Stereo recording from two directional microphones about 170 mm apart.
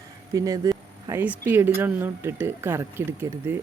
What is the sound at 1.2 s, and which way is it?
Speech, 10° right (ahead or behind).